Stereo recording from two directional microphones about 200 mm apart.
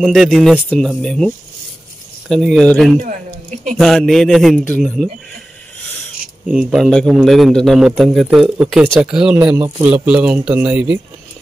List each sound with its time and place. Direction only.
0.0 s a man's voice: centre (ahead or behind)
3.0 s a sound: 35° right (ahead or behind)
3.7 s a man's voice: centre (ahead or behind)
6.4 s a man's voice: 5° right (ahead or behind)